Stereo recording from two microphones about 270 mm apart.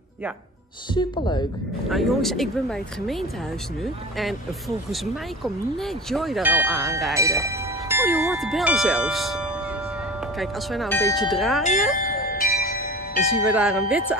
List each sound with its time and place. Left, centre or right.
0.9 s speech: centre
1.9 s speech: centre
5.4 s speech: centre
12.3 s bell: left
13.2 s speech: centre